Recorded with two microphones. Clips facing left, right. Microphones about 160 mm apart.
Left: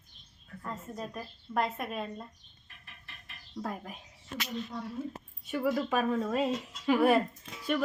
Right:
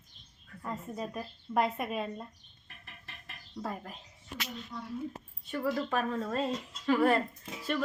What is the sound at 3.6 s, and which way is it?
Speech, 5° left (ahead or behind).